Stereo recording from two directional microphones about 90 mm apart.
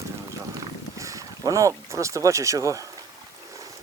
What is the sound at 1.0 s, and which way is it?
Speech, 40° right (ahead or behind).